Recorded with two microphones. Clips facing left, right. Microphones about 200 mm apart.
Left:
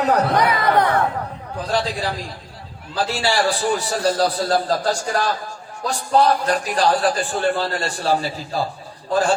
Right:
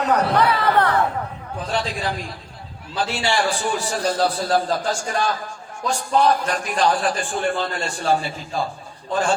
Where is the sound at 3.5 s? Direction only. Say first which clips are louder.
Left 3 dB; 35° left (ahead or behind).